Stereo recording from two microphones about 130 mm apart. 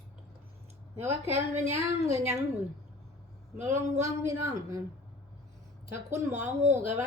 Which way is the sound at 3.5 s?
65° right (ahead or behind).